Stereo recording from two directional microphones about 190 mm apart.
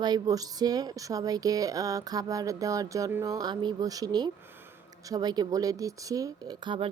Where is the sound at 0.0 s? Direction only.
20° right (ahead or behind).